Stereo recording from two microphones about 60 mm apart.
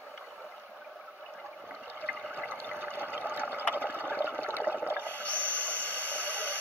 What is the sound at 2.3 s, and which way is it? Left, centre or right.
Water, right.